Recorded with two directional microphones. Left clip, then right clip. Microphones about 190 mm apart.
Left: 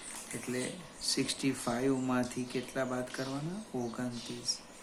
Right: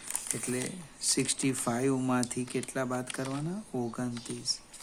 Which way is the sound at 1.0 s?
50° right (ahead or behind).